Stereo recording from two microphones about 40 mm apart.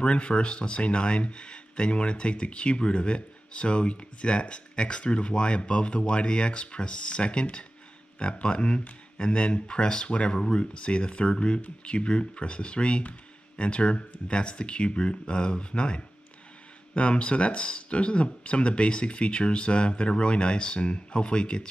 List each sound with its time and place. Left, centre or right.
0.0 s speech: left